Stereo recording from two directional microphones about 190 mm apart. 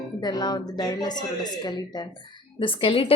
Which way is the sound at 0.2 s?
20° left (ahead or behind).